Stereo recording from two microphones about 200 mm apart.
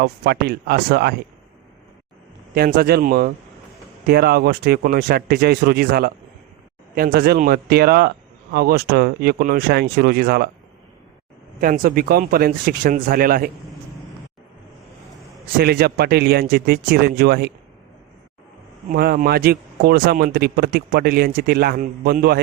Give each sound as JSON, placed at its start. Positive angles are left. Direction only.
{"t": 0.0, "sound": "speech", "side_deg": -55}
{"t": 2.6, "sound": "speech", "side_deg": -50}
{"t": 11.6, "sound": "speech", "side_deg": -45}
{"t": 15.5, "sound": "speech", "side_deg": -50}
{"t": 18.9, "sound": "speech", "side_deg": -50}